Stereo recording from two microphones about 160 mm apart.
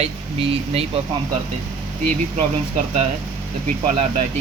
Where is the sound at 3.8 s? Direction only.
45° right (ahead or behind).